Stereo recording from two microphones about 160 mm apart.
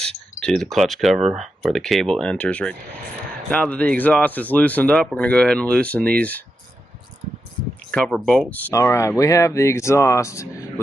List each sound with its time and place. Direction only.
0.0 s speech: 5° left (ahead or behind)
7.9 s speech: 5° left (ahead or behind)